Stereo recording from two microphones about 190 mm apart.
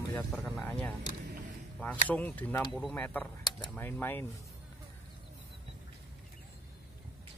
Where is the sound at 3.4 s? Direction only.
20° left (ahead or behind).